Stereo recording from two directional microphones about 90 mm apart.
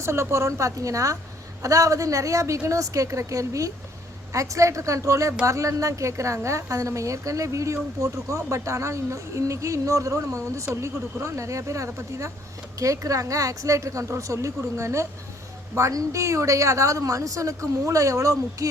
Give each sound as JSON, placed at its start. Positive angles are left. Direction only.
{"t": 0.0, "sound": "a woman's voice", "side_deg": -30}